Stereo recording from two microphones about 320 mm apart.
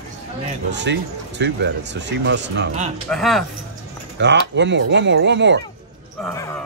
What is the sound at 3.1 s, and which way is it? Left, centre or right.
Speech, centre.